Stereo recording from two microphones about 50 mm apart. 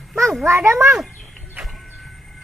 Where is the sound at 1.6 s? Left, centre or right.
Centre.